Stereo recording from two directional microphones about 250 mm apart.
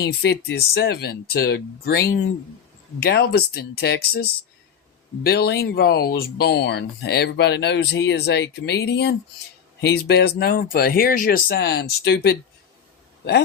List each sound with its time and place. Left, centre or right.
0.0 s speech: left